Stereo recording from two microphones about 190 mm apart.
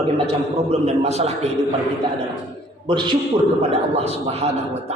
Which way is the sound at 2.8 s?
25° right (ahead or behind).